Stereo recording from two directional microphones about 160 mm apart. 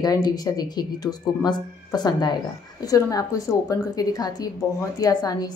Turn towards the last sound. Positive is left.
turn(degrees=25)  # may be behind; listen again after turning